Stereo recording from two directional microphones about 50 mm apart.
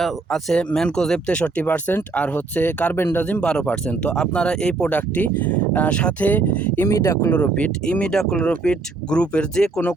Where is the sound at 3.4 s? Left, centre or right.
Centre.